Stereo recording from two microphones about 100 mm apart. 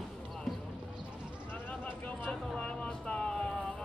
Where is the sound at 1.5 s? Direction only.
15° left (ahead or behind).